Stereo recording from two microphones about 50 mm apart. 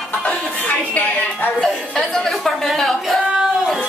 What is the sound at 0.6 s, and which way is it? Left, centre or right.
Music, left.